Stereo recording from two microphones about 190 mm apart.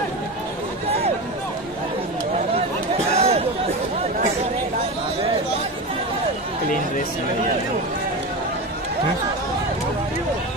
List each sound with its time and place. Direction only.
3.2 s chatter: 30° right (ahead or behind)